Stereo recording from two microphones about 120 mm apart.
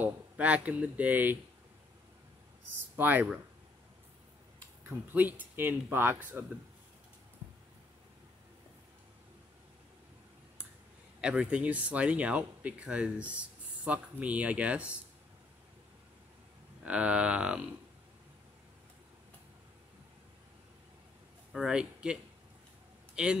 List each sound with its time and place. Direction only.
0.0 s speech: 10° right (ahead or behind)
3.0 s speech: 15° right (ahead or behind)
4.8 s speech: 15° right (ahead or behind)
11.1 s speech: 10° right (ahead or behind)
16.8 s speech: 10° right (ahead or behind)
21.5 s speech: 5° right (ahead or behind)